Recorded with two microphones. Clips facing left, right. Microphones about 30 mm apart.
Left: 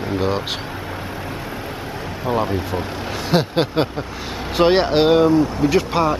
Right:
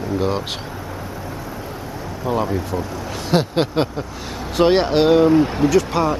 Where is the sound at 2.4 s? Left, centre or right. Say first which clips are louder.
Even; left.